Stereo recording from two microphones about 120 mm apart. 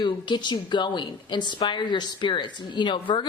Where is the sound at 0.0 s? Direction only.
40° left (ahead or behind).